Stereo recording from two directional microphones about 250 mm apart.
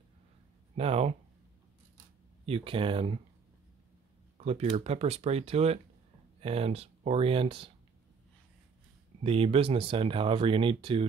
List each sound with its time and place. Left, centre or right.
0.7 s speech: right
2.4 s speech: right
4.4 s speech: right
9.2 s speech: right